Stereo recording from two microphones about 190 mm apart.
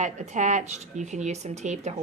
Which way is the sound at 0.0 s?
40° right (ahead or behind).